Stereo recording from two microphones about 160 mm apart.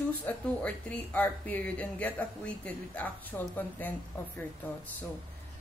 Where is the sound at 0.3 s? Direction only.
10° left (ahead or behind).